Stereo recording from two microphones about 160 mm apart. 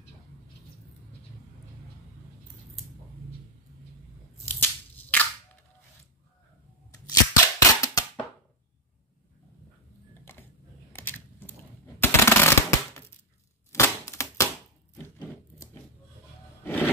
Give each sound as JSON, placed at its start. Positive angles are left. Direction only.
{"t": 4.6, "sound": "scissors", "side_deg": 10}
{"t": 6.9, "sound": "cap gun", "side_deg": 20}
{"t": 10.9, "sound": "a sound", "side_deg": 15}
{"t": 13.7, "sound": "typewriter", "side_deg": 15}
{"t": 16.6, "sound": "music", "side_deg": 10}